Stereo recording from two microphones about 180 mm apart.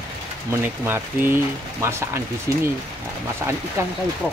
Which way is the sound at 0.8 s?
10° right (ahead or behind).